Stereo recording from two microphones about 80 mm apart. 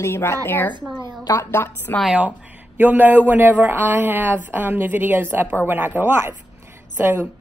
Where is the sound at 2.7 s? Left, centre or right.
Right.